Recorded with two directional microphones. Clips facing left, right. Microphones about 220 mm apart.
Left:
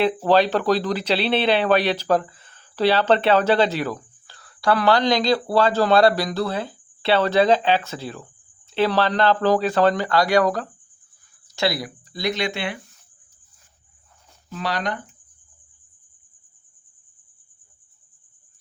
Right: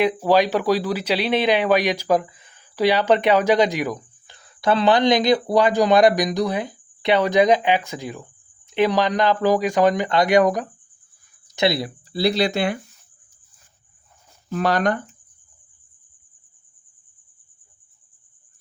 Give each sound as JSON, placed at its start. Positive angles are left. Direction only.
{"t": 0.0, "sound": "speech", "side_deg": -10}
{"t": 14.5, "sound": "speech", "side_deg": -50}